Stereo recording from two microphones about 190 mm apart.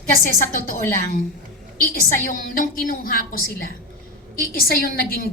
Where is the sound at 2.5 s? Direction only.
50° left (ahead or behind).